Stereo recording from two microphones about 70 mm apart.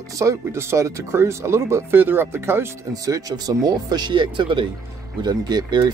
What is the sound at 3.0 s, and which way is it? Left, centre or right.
Speech, right.